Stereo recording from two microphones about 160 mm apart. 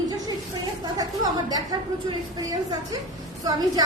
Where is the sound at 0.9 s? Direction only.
25° right (ahead or behind).